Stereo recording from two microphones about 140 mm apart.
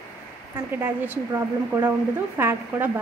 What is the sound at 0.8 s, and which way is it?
Speech, 15° right (ahead or behind).